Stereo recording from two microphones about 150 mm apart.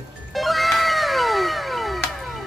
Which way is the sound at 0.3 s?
Centre (ahead or behind).